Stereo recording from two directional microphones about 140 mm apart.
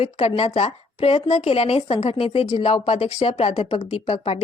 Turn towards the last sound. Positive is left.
turn(degrees=45)  # may be behind; listen again after turning